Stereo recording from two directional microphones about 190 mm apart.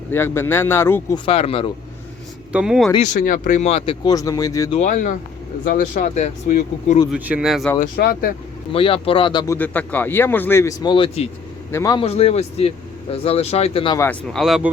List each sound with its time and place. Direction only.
0.1 s a man's voice: 10° left (ahead or behind)
1.2 s speech: 30° left (ahead or behind)
2.5 s speech: 5° right (ahead or behind)
2.9 s speech: 40° left (ahead or behind)
4.0 s a man's voice: 20° left (ahead or behind)
4.7 s speech: 40° left (ahead or behind)
7.1 s speech: 5° right (ahead or behind)
7.9 s speech: 55° left (ahead or behind)
8.7 s speech: 30° left (ahead or behind)
9.6 s a man's voice: 10° left (ahead or behind); by 11.3 s 30° left (ahead or behind)
11.7 s a man's voice: 15° left (ahead or behind)
11.9 s speech: 30° left (ahead or behind)
14.0 s speech: 5° left (ahead or behind)